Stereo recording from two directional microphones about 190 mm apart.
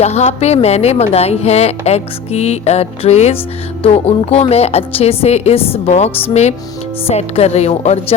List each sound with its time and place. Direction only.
0.0 s a woman's voice: 35° left (ahead or behind)
7.1 s a woman's voice: 35° left (ahead or behind)